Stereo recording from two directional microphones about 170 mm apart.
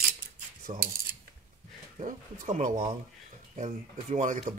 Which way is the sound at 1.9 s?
50° right (ahead or behind).